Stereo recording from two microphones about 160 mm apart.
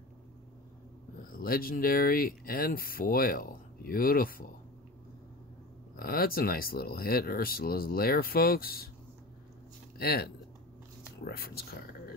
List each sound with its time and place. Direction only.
1.3 s speech: 65° left (ahead or behind)
5.9 s speech: 65° left (ahead or behind)
9.9 s speech: 75° left (ahead or behind)